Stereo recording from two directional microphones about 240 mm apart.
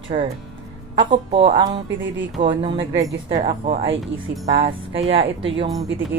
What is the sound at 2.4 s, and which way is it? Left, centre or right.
Speech, right.